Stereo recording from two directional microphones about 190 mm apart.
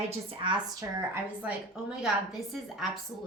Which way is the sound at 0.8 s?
10° right (ahead or behind).